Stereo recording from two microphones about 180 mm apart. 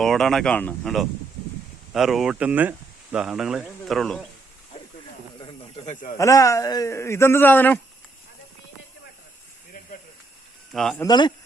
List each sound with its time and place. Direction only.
0.0 s speech: centre (ahead or behind)
5.8 s speech: 45° left (ahead or behind)
6.1 s a man's voice: 20° left (ahead or behind)
10.7 s speech: centre (ahead or behind)
10.9 s speech: 20° left (ahead or behind)